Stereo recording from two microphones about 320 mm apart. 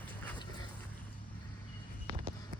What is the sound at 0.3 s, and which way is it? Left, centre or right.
Dog, centre.